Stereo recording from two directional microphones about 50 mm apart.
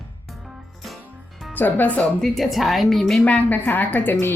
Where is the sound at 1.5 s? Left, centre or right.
Left.